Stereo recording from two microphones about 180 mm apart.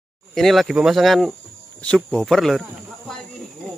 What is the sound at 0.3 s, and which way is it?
Speech, centre (ahead or behind).